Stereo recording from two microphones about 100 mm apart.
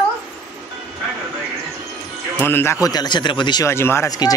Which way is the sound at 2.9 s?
45° left (ahead or behind).